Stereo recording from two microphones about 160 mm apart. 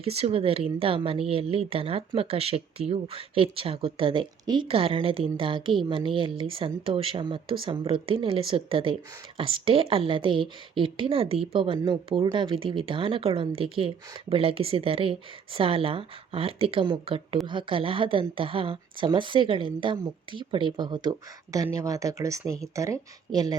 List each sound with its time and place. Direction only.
0.0 s a woman's voice: 40° right (ahead or behind)